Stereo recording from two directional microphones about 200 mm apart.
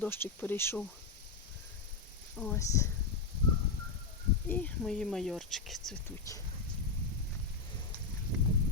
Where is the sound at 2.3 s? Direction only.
10° left (ahead or behind).